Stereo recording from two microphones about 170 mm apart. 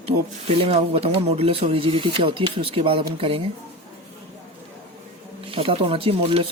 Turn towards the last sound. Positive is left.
turn(degrees=-35)  # may be behind; listen again after turning